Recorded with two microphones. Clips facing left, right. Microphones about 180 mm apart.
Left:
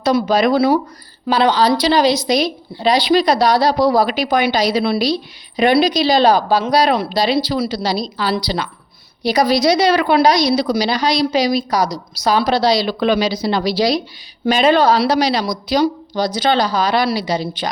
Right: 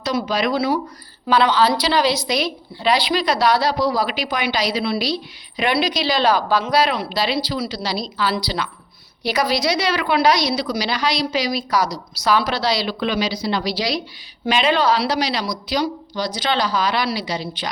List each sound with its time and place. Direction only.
0.0 s speech: 50° left (ahead or behind)
1.3 s a woman's voice: 35° left (ahead or behind)
3.8 s a woman's voice: 55° left (ahead or behind)
5.5 s a woman's voice: 40° left (ahead or behind)
12.9 s a woman's voice: 55° left (ahead or behind)